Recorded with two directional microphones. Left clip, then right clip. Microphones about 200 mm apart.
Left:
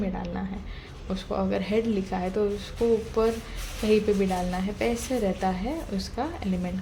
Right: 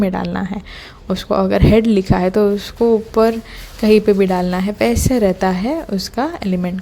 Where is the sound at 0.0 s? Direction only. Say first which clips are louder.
Right 13 dB; 45° right (ahead or behind).